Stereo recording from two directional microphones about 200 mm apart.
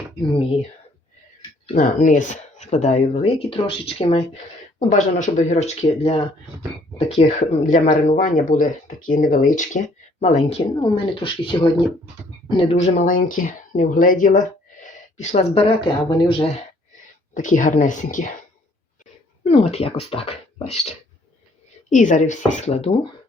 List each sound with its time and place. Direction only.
1.6 s speech: 35° left (ahead or behind)
17.3 s speech: 40° left (ahead or behind)
19.5 s speech: 30° left (ahead or behind)